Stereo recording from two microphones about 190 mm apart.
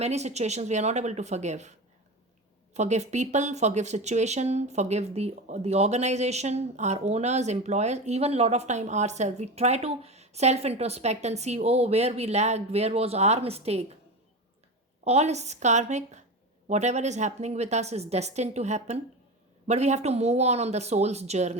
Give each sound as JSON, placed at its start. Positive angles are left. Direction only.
{"t": 0.0, "sound": "speech", "side_deg": -35}
{"t": 2.7, "sound": "speech", "side_deg": -35}
{"t": 15.0, "sound": "speech", "side_deg": -35}